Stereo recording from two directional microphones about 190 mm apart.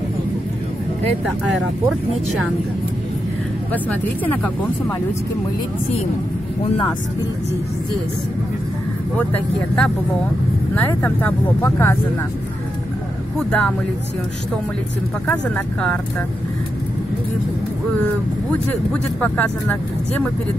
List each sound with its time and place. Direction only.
3.7 s speech: 10° left (ahead or behind)
6.6 s speech: 25° left (ahead or behind)
9.3 s speech: 5° left (ahead or behind)
13.4 s speech: 5° left (ahead or behind)
15.5 s speech: 5° left (ahead or behind)
18.0 s speech: 10° left (ahead or behind)